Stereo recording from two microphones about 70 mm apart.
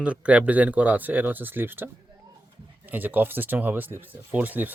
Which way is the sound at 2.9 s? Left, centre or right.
Right.